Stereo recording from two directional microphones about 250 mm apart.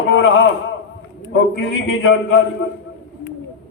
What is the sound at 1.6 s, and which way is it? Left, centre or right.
Speech, left.